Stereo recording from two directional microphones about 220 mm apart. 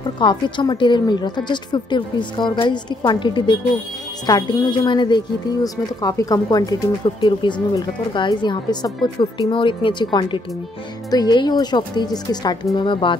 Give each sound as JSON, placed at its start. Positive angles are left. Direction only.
{"t": 0.2, "sound": "a woman's voice", "side_deg": 20}